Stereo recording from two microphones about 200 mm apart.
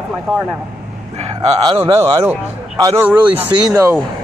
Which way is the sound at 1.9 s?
10° right (ahead or behind).